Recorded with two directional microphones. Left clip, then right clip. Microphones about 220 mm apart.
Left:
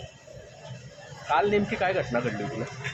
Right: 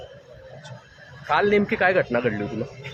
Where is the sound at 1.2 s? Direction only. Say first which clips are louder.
Right 4 dB; 50° right (ahead or behind).